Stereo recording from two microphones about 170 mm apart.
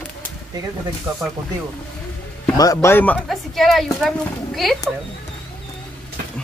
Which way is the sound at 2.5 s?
20° left (ahead or behind).